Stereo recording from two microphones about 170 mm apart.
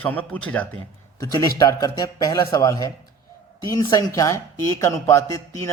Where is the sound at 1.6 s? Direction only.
20° left (ahead or behind).